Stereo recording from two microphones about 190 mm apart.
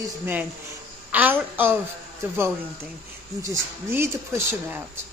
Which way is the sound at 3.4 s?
15° right (ahead or behind).